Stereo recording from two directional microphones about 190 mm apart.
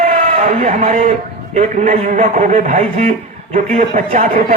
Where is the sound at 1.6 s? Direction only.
45° right (ahead or behind).